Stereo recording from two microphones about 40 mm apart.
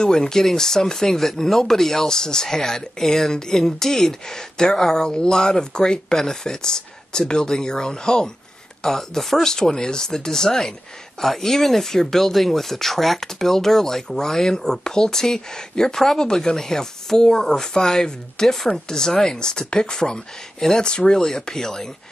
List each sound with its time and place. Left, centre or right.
0.0 s speech: centre